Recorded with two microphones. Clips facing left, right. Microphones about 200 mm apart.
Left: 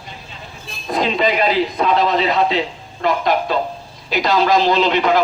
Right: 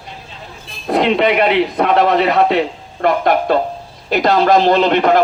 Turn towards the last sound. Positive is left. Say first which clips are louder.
# right 3 dB
turn(degrees=-55)  # may be behind; listen again after turning